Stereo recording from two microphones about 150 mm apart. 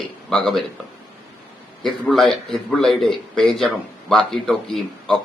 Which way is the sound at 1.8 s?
Centre (ahead or behind).